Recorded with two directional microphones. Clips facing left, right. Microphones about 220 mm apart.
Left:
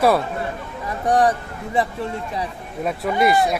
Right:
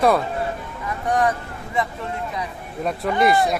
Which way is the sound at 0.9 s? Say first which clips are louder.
Left 3 dB; 35° left (ahead or behind).